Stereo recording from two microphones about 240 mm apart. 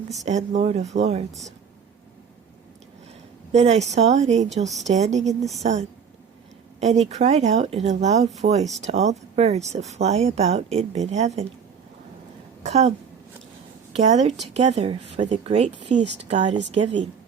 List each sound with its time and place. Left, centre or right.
0.3 s speech: right
1.3 s speech: centre
3.5 s speech: right
12.6 s a woman's voice: right
13.9 s a woman's voice: right